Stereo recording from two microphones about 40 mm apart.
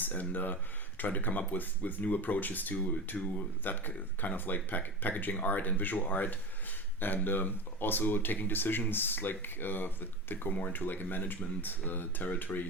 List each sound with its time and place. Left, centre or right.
0.0 s speech: left